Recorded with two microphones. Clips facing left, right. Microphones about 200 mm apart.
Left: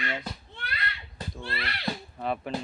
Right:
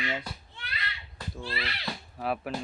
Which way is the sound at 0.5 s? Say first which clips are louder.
Left 4 dB; 55° left (ahead or behind).